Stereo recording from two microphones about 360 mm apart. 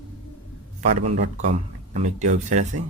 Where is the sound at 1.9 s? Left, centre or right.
Centre.